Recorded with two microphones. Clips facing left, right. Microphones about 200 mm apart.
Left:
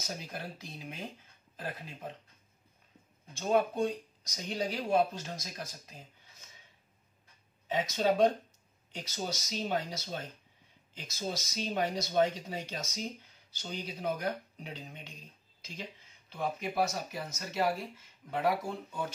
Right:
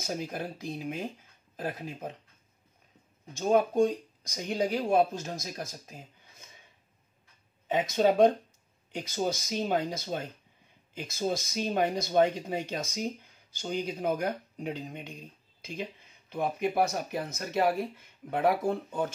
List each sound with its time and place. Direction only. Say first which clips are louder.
0.0 s speech: right 7 dB; 50° right (ahead or behind)
3.3 s speech: right 5 dB; 40° right (ahead or behind)
7.6 s speech: right 5 dB; 55° right (ahead or behind)